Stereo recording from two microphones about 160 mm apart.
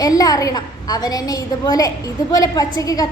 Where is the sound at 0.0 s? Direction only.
20° left (ahead or behind).